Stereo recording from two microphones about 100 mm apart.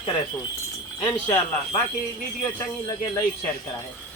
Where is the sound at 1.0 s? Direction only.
15° left (ahead or behind).